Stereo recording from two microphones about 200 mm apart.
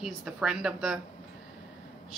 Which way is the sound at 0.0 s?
5° right (ahead or behind).